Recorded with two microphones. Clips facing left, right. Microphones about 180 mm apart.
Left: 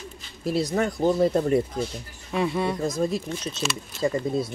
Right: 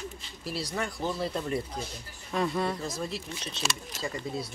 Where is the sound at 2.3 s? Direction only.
5° left (ahead or behind).